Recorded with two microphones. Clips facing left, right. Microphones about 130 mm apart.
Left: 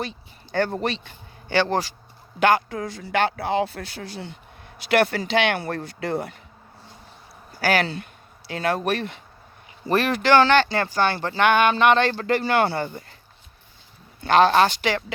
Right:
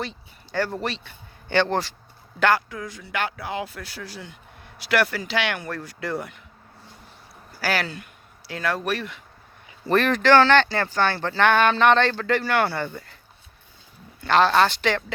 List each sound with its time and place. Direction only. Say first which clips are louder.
0.0 s speech: left 1 dB; 20° left (ahead or behind)
7.6 s speech: left 4 dB; 20° left (ahead or behind)
9.8 s speech: right 2 dB; 5° left (ahead or behind); by 12.8 s 25° left (ahead or behind)
14.2 s speech: left 2 dB; 15° left (ahead or behind)